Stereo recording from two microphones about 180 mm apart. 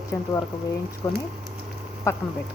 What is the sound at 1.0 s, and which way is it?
Speech, 20° left (ahead or behind).